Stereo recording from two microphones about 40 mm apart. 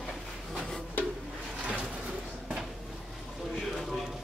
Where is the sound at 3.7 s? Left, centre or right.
Centre.